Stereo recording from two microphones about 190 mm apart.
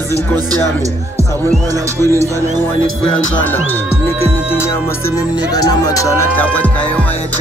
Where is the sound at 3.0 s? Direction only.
5° left (ahead or behind).